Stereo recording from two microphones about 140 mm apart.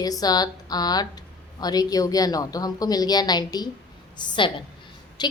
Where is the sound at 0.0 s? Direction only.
25° left (ahead or behind).